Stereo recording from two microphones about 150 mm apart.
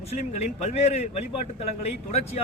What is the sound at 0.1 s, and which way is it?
Speech, 45° left (ahead or behind).